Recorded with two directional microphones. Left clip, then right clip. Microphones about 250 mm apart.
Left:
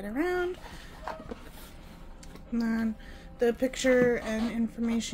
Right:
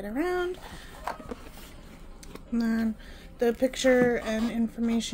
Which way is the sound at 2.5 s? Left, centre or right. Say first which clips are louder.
Right 2 dB; centre.